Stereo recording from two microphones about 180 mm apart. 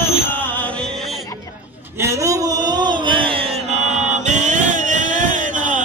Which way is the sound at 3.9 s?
40° right (ahead or behind).